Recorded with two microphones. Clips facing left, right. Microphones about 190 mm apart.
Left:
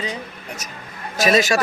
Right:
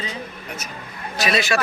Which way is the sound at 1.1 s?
45° left (ahead or behind).